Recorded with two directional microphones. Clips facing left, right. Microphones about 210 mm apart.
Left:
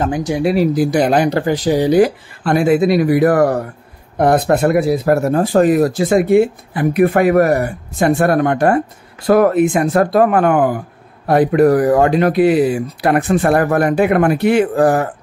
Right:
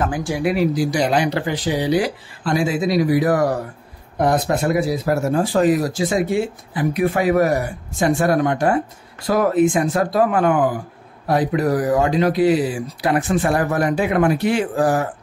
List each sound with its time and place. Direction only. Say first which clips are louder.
0.0 s speech: left 4 dB; 20° left (ahead or behind)
0.7 s speech: left 5 dB; 55° left (ahead or behind)